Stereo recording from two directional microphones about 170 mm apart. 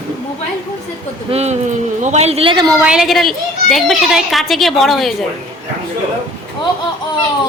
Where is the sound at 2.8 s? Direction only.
5° right (ahead or behind).